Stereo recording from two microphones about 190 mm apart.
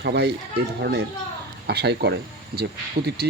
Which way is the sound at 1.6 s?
60° right (ahead or behind).